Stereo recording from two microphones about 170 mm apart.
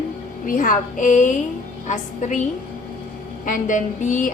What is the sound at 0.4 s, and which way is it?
Speech, 50° left (ahead or behind).